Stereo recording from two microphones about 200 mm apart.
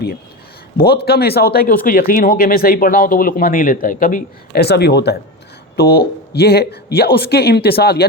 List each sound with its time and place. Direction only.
1.0 s speech: 50° left (ahead or behind)